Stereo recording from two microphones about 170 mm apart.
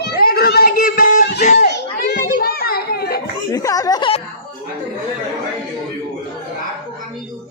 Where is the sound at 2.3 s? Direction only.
60° left (ahead or behind).